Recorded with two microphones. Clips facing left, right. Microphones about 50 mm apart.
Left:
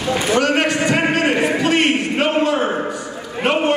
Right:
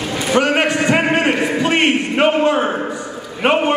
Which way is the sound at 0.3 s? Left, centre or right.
Centre.